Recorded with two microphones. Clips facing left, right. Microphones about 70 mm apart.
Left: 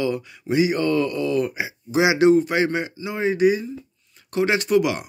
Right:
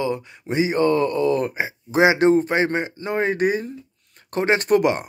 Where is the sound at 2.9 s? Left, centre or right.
Right.